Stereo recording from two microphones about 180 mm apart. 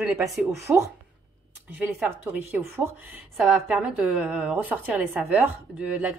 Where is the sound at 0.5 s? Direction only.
15° right (ahead or behind).